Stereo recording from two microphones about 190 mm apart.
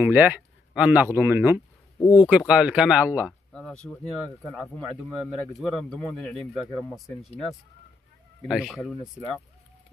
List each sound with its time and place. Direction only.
0.0 s speech: 10° right (ahead or behind)
2.0 s speech: 25° left (ahead or behind)
2.2 s speech: 5° right (ahead or behind)
3.5 s speech: 5° left (ahead or behind)
8.5 s speech: centre (ahead or behind)